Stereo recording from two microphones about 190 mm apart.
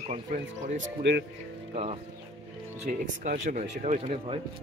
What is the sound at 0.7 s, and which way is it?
Speech, 75° right (ahead or behind).